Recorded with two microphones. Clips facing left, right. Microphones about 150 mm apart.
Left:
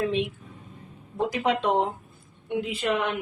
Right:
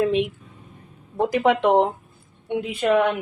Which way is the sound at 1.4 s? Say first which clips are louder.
Right 7 dB; 65° right (ahead or behind).